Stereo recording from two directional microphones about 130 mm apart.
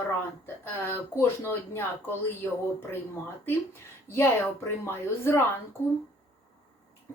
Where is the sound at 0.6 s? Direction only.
15° left (ahead or behind).